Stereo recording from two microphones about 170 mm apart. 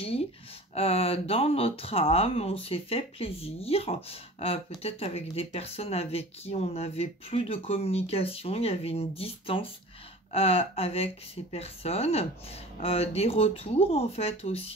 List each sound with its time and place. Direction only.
0.7 s speech: 35° left (ahead or behind)